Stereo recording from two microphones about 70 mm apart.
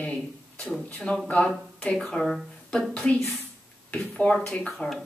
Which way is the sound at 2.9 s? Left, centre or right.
Centre.